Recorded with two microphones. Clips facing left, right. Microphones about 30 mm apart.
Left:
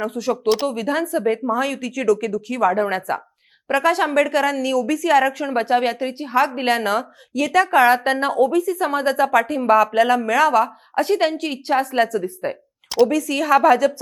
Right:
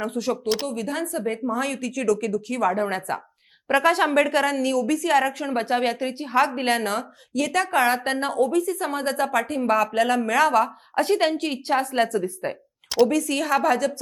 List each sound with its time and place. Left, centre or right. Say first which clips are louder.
0.0 s a woman's voice: left 4 dB; centre
0.7 s speech: left 6 dB; centre
1.5 s speech: left 4 dB; centre
3.7 s a woman's voice: left 1 dB; centre